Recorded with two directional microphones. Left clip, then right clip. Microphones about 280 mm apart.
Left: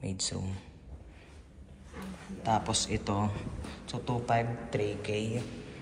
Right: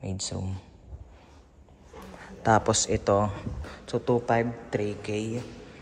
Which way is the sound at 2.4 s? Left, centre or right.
Right.